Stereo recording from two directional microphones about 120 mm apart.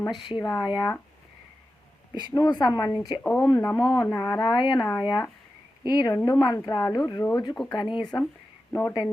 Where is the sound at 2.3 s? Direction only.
35° left (ahead or behind).